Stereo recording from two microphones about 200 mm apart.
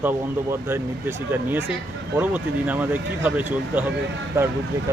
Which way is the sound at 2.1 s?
10° right (ahead or behind).